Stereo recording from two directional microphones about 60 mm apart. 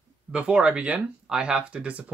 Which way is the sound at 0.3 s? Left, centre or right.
Centre.